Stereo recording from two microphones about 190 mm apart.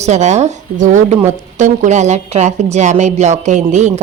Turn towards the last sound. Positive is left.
turn(degrees=-35)  # may be behind; listen again after turning